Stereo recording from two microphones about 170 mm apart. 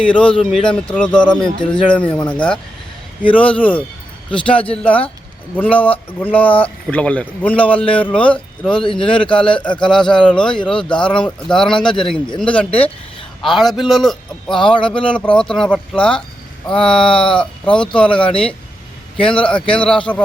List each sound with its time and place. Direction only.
0.0 s a man's voice: 5° left (ahead or behind)
8.7 s speech: 30° left (ahead or behind)
10.2 s a man's voice: 5° left (ahead or behind)
14.6 s speech: 30° left (ahead or behind)
15.0 s a man's voice: 5° left (ahead or behind)